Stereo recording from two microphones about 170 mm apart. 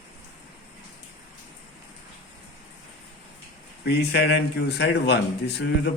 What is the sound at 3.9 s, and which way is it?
A man's voice, 75° left (ahead or behind).